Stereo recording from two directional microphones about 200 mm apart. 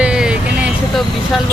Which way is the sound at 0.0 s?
5° right (ahead or behind).